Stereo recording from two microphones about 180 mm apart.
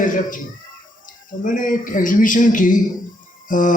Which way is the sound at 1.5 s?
50° left (ahead or behind).